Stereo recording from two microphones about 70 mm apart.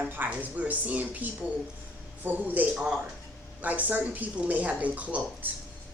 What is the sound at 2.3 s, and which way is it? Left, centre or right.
Speech, right.